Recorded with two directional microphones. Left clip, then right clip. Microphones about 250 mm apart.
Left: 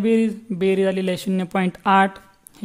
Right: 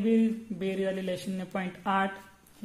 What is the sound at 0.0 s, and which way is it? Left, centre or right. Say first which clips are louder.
A man's voice: left 8 dB; left.